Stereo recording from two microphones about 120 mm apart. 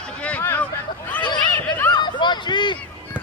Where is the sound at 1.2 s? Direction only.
40° left (ahead or behind).